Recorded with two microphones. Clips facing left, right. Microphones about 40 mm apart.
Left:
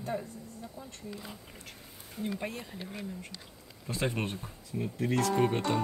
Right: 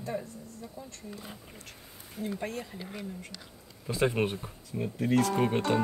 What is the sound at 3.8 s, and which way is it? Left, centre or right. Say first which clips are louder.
Speech: right 5 dB; centre.